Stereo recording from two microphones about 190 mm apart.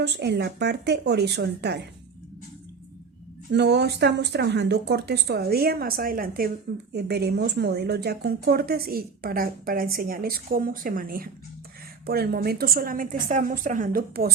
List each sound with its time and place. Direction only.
0.0 s speech: 60° right (ahead or behind)
3.5 s a woman's voice: 65° right (ahead or behind); by 14.3 s 45° right (ahead or behind)